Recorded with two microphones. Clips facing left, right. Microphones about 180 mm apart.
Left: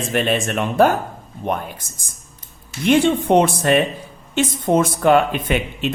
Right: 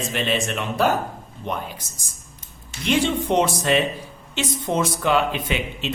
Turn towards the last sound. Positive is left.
turn(degrees=50)  # may be behind; listen again after turning